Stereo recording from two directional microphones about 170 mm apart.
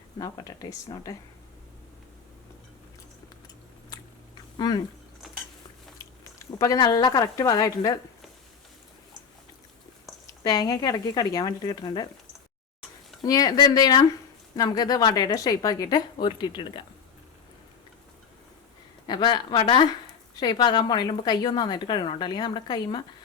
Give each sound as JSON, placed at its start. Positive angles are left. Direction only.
{"t": 0.2, "sound": "a woman's voice", "side_deg": 20}
{"t": 3.9, "sound": "a sound", "side_deg": 25}
{"t": 4.5, "sound": "speech", "side_deg": 25}
{"t": 6.6, "sound": "a woman's voice", "side_deg": 20}
{"t": 10.2, "sound": "a woman's voice", "side_deg": 20}
{"t": 13.2, "sound": "a woman's voice", "side_deg": 20}
{"t": 19.0, "sound": "a woman's voice", "side_deg": 25}